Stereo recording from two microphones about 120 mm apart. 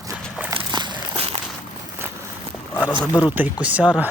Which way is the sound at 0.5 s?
40° right (ahead or behind).